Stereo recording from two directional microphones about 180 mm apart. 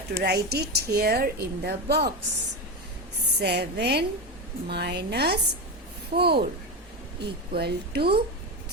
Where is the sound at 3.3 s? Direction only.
65° right (ahead or behind).